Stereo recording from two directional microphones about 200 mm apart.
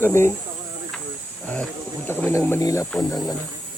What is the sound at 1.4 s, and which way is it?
Speech, 5° left (ahead or behind).